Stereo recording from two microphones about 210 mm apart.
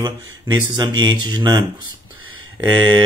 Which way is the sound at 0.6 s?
20° right (ahead or behind).